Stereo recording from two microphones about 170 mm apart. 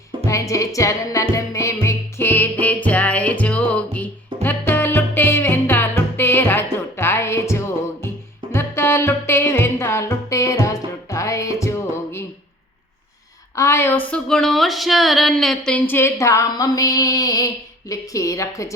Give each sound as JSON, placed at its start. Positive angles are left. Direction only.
{"t": 0.3, "sound": "music", "side_deg": 20}
{"t": 13.6, "sound": "speech", "side_deg": 15}